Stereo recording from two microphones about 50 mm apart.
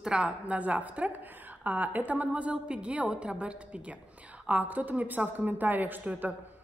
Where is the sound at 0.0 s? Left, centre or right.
Right.